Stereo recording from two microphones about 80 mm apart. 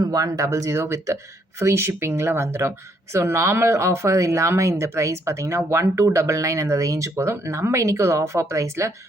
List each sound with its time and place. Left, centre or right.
0.1 s speech: right
0.4 s speech: right